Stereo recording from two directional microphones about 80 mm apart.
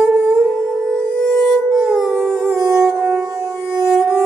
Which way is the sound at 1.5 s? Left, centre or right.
Centre.